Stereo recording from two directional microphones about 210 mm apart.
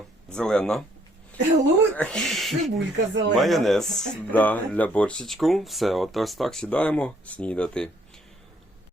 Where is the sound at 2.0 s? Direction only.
5° left (ahead or behind).